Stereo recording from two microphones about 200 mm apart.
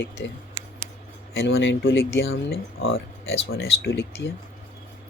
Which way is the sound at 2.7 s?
80° left.